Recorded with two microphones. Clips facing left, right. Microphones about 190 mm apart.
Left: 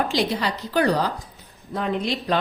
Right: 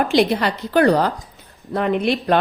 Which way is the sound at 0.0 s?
60° right (ahead or behind).